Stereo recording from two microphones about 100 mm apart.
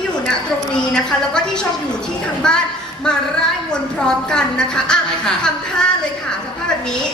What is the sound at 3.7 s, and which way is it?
Speech, 5° left (ahead or behind).